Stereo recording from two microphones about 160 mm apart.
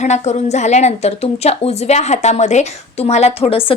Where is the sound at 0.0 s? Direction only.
45° left (ahead or behind).